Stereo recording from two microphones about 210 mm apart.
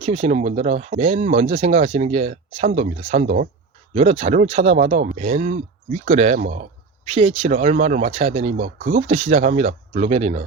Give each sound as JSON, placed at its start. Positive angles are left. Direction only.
{"t": 0.0, "sound": "speech", "side_deg": -30}